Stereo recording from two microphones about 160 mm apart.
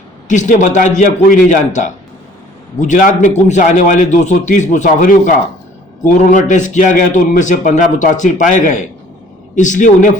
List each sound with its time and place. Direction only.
0.3 s a man's voice: 50° left (ahead or behind)